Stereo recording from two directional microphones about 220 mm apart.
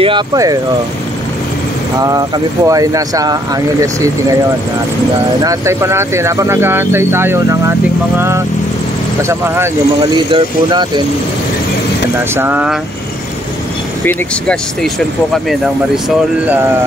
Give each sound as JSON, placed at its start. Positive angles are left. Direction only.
{"t": 0.0, "sound": "speech", "side_deg": -20}
{"t": 2.0, "sound": "speech", "side_deg": -15}
{"t": 5.4, "sound": "speech", "side_deg": -15}
{"t": 9.3, "sound": "speech", "side_deg": -10}
{"t": 12.4, "sound": "speech", "side_deg": -10}
{"t": 14.0, "sound": "speech", "side_deg": 5}